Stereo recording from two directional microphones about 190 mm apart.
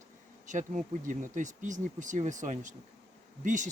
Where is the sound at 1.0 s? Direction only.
40° right (ahead or behind).